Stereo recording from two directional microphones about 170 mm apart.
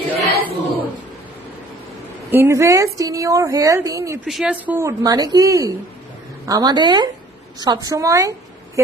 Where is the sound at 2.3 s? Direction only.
15° right (ahead or behind).